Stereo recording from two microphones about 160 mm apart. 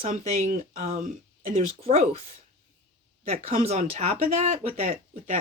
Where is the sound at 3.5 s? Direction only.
40° right (ahead or behind).